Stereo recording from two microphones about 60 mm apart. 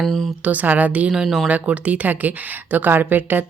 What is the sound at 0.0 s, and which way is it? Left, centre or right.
Speech, centre.